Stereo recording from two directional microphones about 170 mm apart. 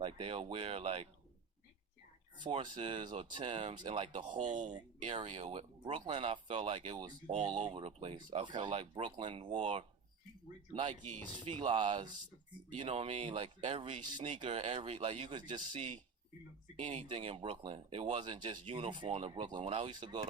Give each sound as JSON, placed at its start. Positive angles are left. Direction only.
{"t": 0.0, "sound": "speech", "side_deg": -35}
{"t": 2.4, "sound": "speech", "side_deg": -25}
{"t": 4.3, "sound": "speech", "side_deg": -45}
{"t": 4.7, "sound": "speech", "side_deg": -30}
{"t": 7.3, "sound": "speech", "side_deg": -35}
{"t": 8.7, "sound": "speech", "side_deg": -40}
{"t": 9.0, "sound": "speech", "side_deg": -30}
{"t": 10.7, "sound": "speech", "side_deg": -30}
{"t": 16.8, "sound": "speech", "side_deg": -40}